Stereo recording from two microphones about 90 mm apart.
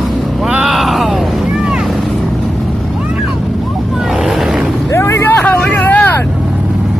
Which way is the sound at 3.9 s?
5° right (ahead or behind).